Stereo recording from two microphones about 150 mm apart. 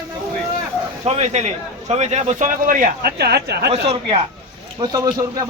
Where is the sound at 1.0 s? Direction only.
45° right (ahead or behind); by 3.7 s 90° right.